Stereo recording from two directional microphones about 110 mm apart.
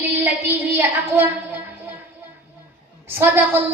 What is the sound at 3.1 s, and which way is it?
Speech, 20° right (ahead or behind).